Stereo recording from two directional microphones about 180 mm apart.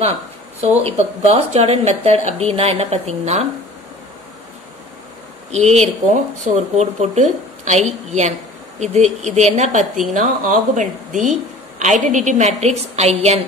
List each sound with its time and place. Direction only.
0.6 s speech: 35° right (ahead or behind)
5.5 s a woman's voice: 40° right (ahead or behind)